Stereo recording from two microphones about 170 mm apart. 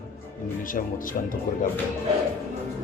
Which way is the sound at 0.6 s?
55° left (ahead or behind).